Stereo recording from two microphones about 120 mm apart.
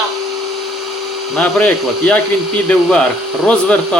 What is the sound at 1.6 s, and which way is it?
Speech, 15° left (ahead or behind).